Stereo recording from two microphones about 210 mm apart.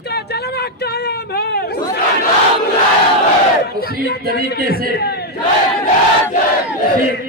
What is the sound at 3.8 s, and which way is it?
Speech, 45° left (ahead or behind).